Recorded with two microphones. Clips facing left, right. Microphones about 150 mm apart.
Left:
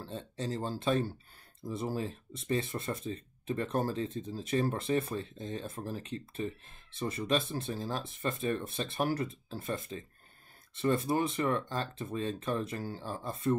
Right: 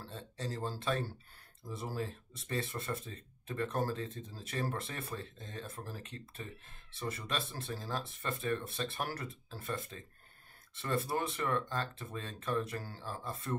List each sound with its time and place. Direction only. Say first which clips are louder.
0.1 s speech: left 5 dB; 20° left (ahead or behind)